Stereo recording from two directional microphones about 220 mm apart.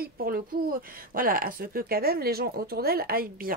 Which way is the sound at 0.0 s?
40° right (ahead or behind).